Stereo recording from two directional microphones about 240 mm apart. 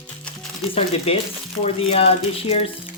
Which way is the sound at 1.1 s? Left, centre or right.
Left.